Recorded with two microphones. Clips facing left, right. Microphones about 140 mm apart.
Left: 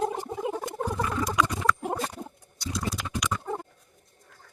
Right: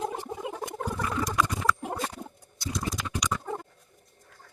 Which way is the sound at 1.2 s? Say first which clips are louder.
Left 1 dB; centre (ahead or behind).